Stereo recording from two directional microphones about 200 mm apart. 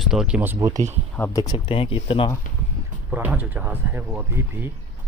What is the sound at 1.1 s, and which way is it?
Speech, 15° left (ahead or behind).